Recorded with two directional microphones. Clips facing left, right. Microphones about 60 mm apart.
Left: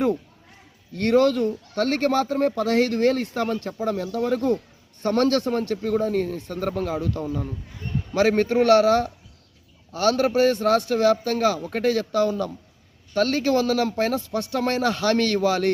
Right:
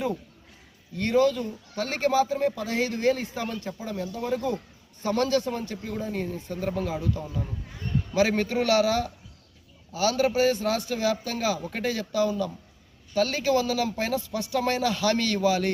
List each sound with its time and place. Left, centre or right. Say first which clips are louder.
0.9 s speech: left 4 dB; left